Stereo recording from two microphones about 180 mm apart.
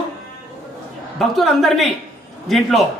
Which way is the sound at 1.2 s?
Centre (ahead or behind).